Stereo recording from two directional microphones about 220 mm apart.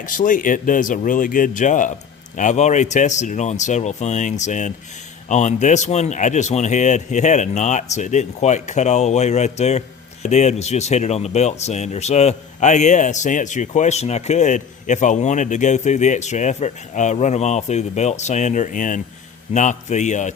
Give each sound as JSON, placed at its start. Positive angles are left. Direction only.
{"t": 0.0, "sound": "speech", "side_deg": 35}